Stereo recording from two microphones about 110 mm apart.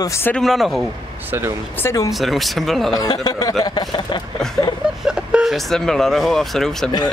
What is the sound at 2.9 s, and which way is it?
Speech, 35° left (ahead or behind).